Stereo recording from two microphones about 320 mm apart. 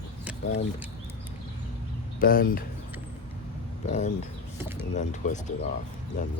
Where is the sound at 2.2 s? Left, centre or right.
Left.